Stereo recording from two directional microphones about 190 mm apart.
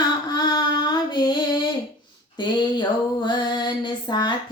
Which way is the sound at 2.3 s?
25° left (ahead or behind).